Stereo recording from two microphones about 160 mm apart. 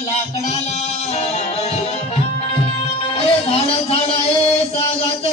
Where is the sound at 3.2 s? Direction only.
35° left (ahead or behind).